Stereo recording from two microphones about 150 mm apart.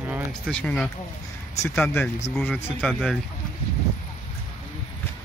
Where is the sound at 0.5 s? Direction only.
5° left (ahead or behind).